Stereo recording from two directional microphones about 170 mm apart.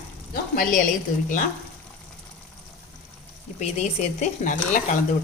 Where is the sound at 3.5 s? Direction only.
40° left (ahead or behind).